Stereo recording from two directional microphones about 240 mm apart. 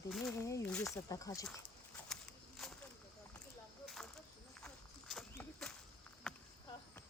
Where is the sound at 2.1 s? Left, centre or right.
Centre.